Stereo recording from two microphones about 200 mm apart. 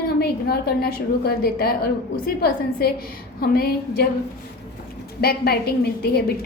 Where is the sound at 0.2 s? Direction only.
50° left (ahead or behind).